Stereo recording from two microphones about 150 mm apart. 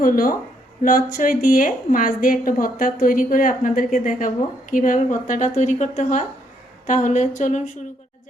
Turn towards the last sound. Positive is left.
turn(degrees=55)  # may be behind; listen again after turning